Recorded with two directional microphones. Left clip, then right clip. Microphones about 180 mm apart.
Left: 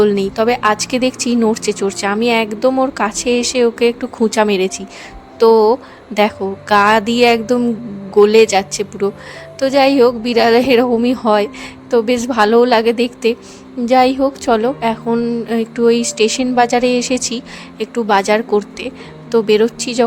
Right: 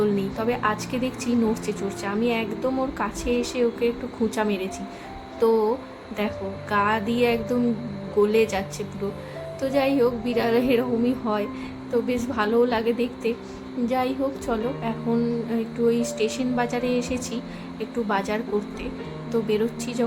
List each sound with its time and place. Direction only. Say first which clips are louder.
0.0 s a woman's voice: left 11 dB; 55° left (ahead or behind)